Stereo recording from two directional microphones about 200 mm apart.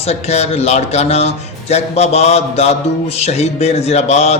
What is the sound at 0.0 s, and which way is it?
A man's voice, 30° left (ahead or behind).